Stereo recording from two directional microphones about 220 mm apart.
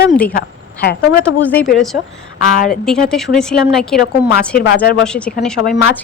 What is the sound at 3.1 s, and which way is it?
Speech, centre (ahead or behind).